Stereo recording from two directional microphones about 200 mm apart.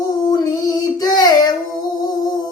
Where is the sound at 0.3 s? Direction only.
20° left (ahead or behind).